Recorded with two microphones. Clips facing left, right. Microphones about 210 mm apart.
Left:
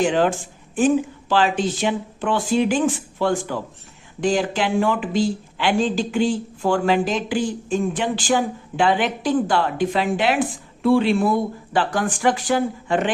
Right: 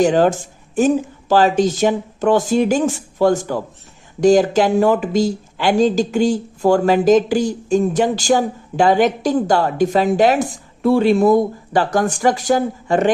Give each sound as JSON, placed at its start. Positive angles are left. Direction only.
{"t": 0.0, "sound": "speech", "side_deg": -40}